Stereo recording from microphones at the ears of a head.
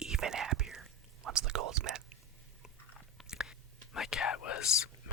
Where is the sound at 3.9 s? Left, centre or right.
Left.